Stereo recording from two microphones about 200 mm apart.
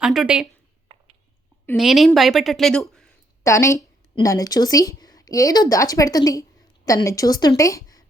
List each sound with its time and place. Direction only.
0.0 s a woman's voice: 5° right (ahead or behind)
0.9 s a sound: 30° right (ahead or behind)
1.7 s a woman's voice: centre (ahead or behind)
3.4 s a woman's voice: 15° left (ahead or behind)